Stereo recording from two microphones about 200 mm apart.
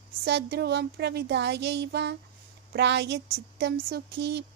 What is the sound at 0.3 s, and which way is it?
Speech, 55° right (ahead or behind).